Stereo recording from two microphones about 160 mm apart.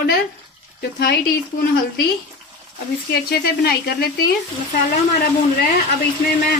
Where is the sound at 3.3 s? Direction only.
75° left (ahead or behind).